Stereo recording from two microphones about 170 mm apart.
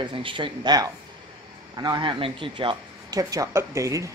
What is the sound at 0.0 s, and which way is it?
Speech, 30° right (ahead or behind).